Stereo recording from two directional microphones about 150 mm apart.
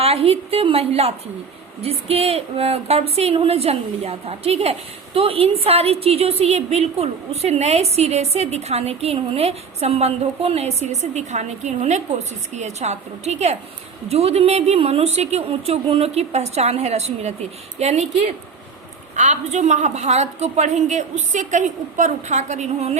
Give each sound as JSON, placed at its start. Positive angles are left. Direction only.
{"t": 0.0, "sound": "a woman's voice", "side_deg": -40}
{"t": 19.1, "sound": "speech", "side_deg": -50}